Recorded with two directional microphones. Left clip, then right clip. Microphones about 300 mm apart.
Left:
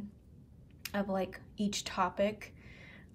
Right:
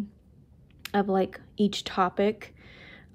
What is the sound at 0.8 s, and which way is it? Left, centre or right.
Speech, right.